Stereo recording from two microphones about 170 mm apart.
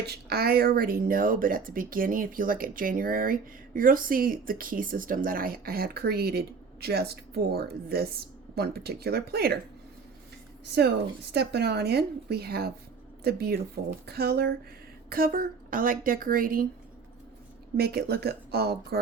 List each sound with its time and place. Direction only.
0.0 s speech: 65° right (ahead or behind)
10.8 s speech: 75° right (ahead or behind)
15.1 s speech: 55° right (ahead or behind)
17.7 s speech: 65° right (ahead or behind)